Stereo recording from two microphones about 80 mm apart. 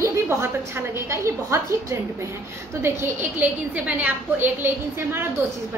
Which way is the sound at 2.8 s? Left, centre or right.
Right.